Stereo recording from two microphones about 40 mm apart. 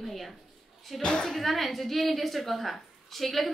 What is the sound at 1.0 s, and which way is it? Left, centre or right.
Speech, centre.